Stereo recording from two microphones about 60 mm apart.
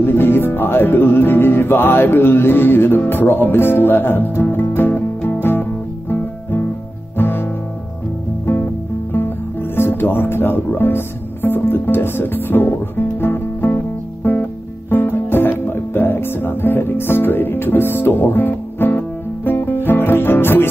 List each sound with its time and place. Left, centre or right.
0.0 s music: left
9.8 s music: left
14.9 s music: left